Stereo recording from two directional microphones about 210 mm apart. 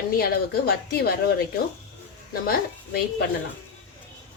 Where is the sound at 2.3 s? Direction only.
45° left (ahead or behind).